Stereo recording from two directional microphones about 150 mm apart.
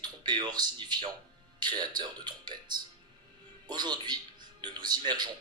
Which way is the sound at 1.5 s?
30° right (ahead or behind).